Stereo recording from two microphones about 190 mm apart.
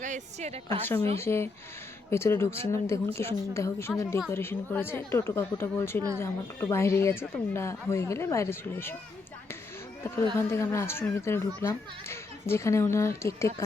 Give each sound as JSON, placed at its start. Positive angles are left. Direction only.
{"t": 0.0, "sound": "a woman's voice", "side_deg": -40}
{"t": 1.2, "sound": "speech", "side_deg": 15}
{"t": 10.3, "sound": "speech", "side_deg": 15}